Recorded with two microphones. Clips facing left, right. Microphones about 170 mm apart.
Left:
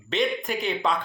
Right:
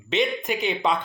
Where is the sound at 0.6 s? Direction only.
20° right (ahead or behind).